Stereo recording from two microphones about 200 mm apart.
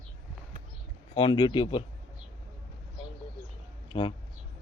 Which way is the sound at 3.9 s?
25° left (ahead or behind).